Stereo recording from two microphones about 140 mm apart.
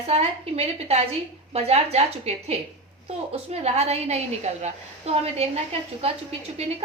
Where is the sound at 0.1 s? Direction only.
45° right (ahead or behind).